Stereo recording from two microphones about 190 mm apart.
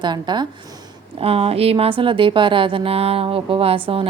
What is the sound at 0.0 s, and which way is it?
A woman's voice, 25° right (ahead or behind).